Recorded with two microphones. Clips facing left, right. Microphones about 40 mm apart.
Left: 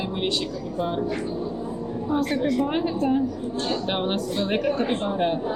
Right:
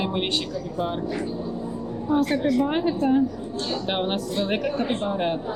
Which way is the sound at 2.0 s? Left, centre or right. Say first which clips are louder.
Right 2 dB; centre.